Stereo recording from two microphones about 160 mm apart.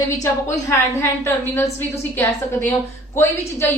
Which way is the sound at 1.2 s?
15° left (ahead or behind).